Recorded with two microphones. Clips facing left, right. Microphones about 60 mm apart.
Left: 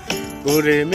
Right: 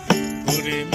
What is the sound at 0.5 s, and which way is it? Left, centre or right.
Music, left.